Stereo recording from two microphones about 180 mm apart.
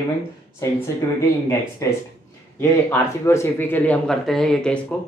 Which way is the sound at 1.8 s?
15° left (ahead or behind).